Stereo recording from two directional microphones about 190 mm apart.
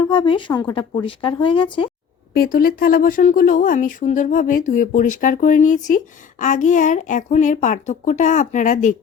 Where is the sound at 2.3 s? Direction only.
50° left (ahead or behind).